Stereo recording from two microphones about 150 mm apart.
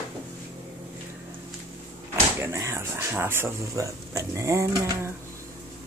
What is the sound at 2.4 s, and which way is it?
Speech, 20° right (ahead or behind).